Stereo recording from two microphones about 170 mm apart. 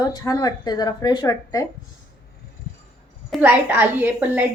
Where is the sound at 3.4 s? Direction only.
10° right (ahead or behind).